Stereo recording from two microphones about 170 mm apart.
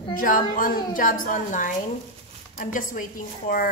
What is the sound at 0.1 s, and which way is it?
A woman's voice, 55° left (ahead or behind).